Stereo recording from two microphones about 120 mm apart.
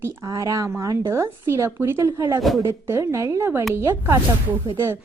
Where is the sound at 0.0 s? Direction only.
25° right (ahead or behind).